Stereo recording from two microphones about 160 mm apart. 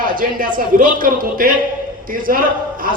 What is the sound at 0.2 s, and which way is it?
Speech, 60° right (ahead or behind).